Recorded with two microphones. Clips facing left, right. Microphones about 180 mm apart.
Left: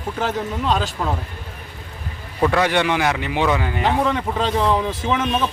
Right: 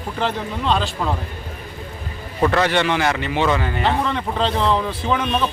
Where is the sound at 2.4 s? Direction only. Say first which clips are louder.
Even; 10° left (ahead or behind).